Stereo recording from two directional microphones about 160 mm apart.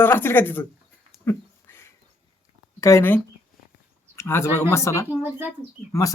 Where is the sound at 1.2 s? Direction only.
15° left (ahead or behind).